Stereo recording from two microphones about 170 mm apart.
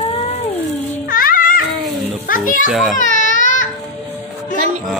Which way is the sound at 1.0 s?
55° left (ahead or behind).